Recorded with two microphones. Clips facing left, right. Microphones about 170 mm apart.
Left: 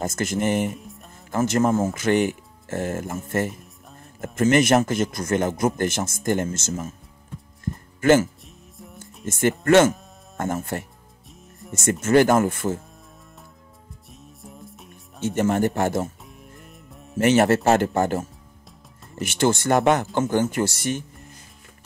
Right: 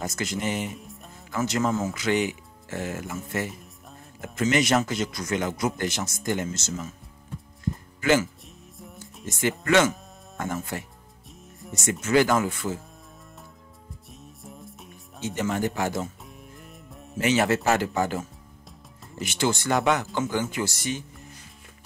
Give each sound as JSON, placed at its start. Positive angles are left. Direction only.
{"t": 0.0, "sound": "a man's voice", "side_deg": 50}
{"t": 0.7, "sound": "music", "side_deg": 0}
{"t": 1.3, "sound": "a man's voice", "side_deg": 50}
{"t": 7.6, "sound": "music", "side_deg": 50}
{"t": 9.2, "sound": "a man's voice", "side_deg": 50}
{"t": 14.1, "sound": "music", "side_deg": 0}
{"t": 15.3, "sound": "a man's voice", "side_deg": 50}
{"t": 16.3, "sound": "music", "side_deg": 0}
{"t": 17.2, "sound": "a man's voice", "side_deg": 50}